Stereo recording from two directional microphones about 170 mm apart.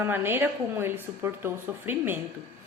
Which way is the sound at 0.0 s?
15° right (ahead or behind).